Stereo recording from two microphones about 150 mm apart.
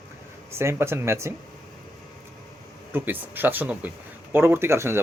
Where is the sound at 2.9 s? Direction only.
10° right (ahead or behind).